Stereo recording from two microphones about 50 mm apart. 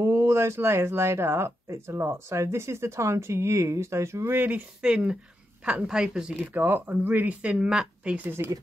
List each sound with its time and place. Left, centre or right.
0.0 s speech: right
4.3 s speech: right
4.8 s a woman's voice: centre
6.4 s speech: right
7.4 s speech: right
8.4 s speech: right